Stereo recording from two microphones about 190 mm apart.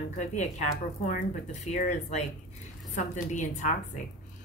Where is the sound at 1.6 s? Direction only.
40° left (ahead or behind).